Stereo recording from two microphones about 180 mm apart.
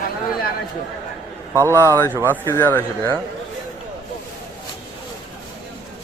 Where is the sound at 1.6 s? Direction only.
15° right (ahead or behind).